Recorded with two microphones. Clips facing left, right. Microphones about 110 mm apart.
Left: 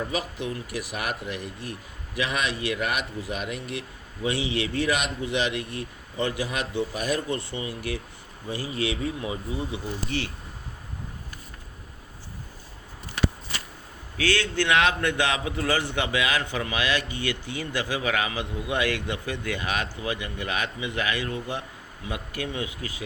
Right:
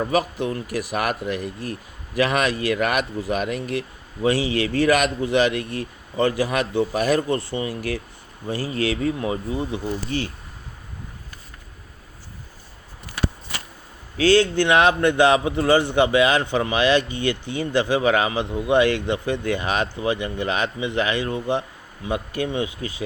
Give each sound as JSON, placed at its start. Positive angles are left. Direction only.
{"t": 0.0, "sound": "speech", "side_deg": -60}
{"t": 5.5, "sound": "speech", "side_deg": -65}
{"t": 6.2, "sound": "speech", "side_deg": -45}
{"t": 9.6, "sound": "speech", "side_deg": -35}
{"t": 14.2, "sound": "a man's voice", "side_deg": -30}